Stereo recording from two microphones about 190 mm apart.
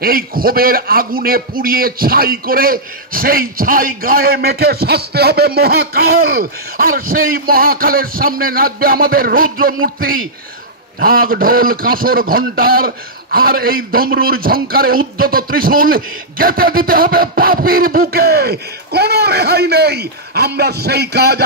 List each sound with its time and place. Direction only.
0.0 s a man's voice: 50° right (ahead or behind)